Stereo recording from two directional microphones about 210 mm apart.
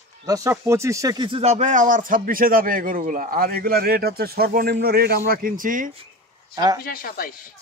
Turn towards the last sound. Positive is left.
turn(degrees=45)  # may be behind; listen again after turning